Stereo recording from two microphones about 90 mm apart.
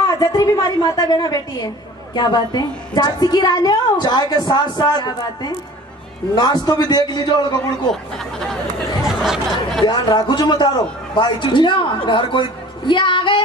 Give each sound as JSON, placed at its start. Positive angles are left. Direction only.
{"t": 0.2, "sound": "a woman's voice", "side_deg": 40}
{"t": 7.9, "sound": "speech", "side_deg": 5}
{"t": 9.0, "sound": "speech", "side_deg": -5}
{"t": 9.8, "sound": "a woman's voice", "side_deg": 50}